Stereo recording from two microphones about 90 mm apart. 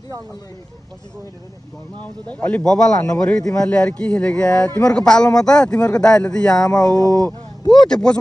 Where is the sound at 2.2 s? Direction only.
15° left (ahead or behind).